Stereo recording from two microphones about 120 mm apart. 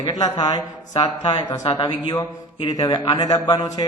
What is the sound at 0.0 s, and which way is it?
A man's voice, 40° left (ahead or behind).